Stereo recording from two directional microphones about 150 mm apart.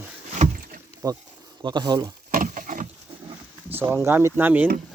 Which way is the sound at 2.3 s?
65° right (ahead or behind).